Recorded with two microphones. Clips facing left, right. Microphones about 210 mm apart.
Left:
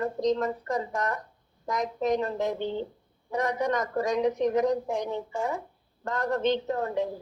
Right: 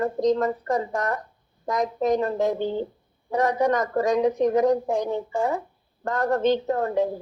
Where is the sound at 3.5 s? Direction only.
50° right (ahead or behind).